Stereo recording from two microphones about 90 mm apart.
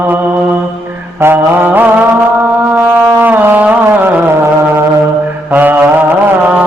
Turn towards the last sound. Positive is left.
turn(degrees=-20)  # may be behind; listen again after turning